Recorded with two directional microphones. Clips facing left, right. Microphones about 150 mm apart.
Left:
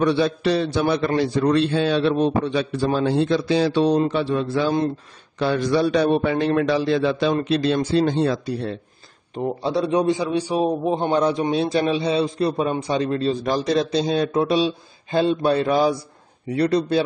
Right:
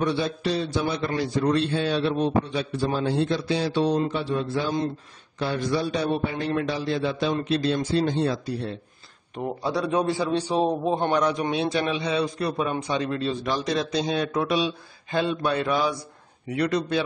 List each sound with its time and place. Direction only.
0.0 s a man's voice: 80° left; by 4.9 s 65° left (ahead or behind)
5.4 s a man's voice: 90° left
7.4 s a man's voice: 80° left
9.3 s a man's voice: 25° left (ahead or behind)
11.1 s a man's voice: 30° left (ahead or behind)